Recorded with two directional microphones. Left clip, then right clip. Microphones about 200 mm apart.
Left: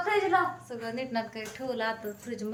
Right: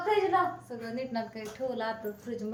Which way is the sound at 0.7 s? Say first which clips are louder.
Left 2 dB; centre (ahead or behind).